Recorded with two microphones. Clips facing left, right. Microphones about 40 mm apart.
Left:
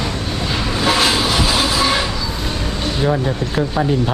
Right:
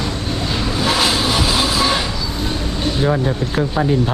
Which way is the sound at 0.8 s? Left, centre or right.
Centre.